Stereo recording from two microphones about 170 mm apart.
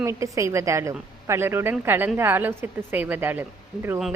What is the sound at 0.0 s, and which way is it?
A woman's voice, 15° right (ahead or behind).